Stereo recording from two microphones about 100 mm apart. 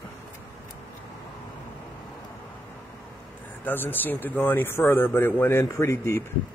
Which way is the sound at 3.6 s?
20° left (ahead or behind).